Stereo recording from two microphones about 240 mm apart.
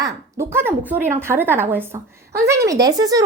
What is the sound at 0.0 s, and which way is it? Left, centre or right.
Speech, centre.